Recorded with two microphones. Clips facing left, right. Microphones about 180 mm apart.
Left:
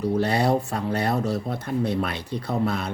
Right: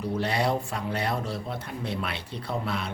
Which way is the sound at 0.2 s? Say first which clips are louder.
Left 3 dB; 40° left (ahead or behind).